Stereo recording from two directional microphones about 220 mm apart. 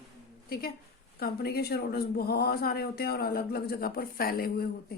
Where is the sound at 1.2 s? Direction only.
45° left (ahead or behind).